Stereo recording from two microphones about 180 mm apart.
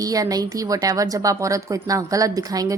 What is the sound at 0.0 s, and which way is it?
A woman's voice, 20° right (ahead or behind).